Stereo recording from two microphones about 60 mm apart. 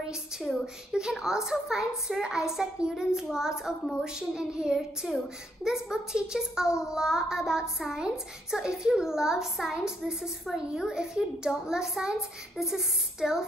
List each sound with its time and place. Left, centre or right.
0.5 s a woman's voice: centre
4.7 s a child's voice: centre